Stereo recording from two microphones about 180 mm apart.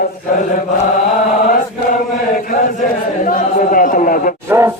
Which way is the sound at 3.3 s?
50° left (ahead or behind).